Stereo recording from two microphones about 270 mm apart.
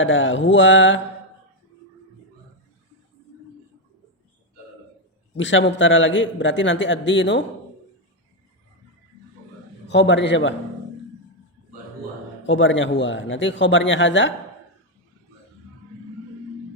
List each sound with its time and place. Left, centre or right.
0.0 s a man's voice: left
5.4 s a man's voice: left
9.8 s a man's voice: left
12.5 s a man's voice: left